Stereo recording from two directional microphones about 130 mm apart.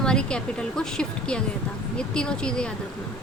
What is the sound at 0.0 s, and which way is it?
A woman's voice, 5° left (ahead or behind).